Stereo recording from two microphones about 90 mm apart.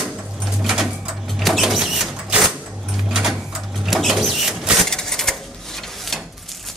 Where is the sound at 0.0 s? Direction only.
5° right (ahead or behind).